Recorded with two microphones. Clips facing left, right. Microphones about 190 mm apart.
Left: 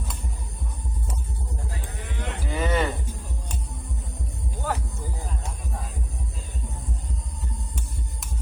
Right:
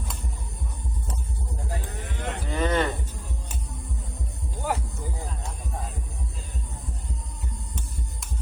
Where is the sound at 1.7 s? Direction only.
45° right (ahead or behind).